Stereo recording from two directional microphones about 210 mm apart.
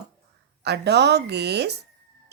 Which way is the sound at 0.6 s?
55° right (ahead or behind).